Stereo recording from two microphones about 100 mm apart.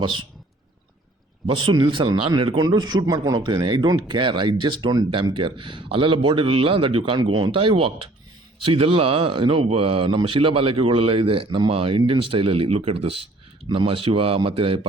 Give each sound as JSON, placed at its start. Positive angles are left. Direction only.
{"t": 0.0, "sound": "speech", "side_deg": -55}
{"t": 1.5, "sound": "a man's voice", "side_deg": -55}
{"t": 3.4, "sound": "a man's voice", "side_deg": -50}
{"t": 13.7, "sound": "speech", "side_deg": -60}